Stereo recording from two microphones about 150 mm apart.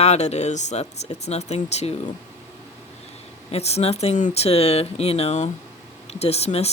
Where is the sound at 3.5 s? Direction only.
45° left (ahead or behind).